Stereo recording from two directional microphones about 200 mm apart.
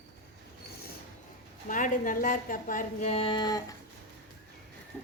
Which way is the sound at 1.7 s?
40° left (ahead or behind).